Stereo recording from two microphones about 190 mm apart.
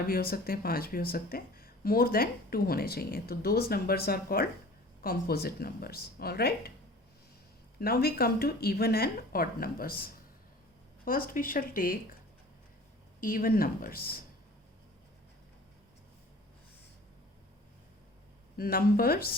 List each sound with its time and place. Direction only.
0.1 s speech: 50° left (ahead or behind)
7.8 s speech: 55° left (ahead or behind)
13.1 s speech: 50° left (ahead or behind)
18.5 s speech: 50° left (ahead or behind)